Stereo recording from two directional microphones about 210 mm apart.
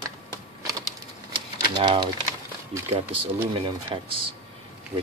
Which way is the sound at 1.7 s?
20° right (ahead or behind).